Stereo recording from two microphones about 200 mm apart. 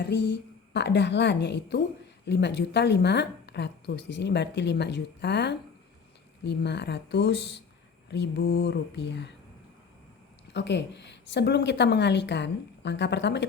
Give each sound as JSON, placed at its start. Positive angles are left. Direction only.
{"t": 0.0, "sound": "a woman's voice", "side_deg": 60}
{"t": 10.5, "sound": "a woman's voice", "side_deg": 60}